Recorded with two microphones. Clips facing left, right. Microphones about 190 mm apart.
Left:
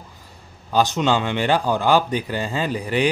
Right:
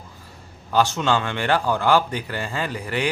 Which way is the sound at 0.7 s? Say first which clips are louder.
Left 1 dB; 15° left (ahead or behind).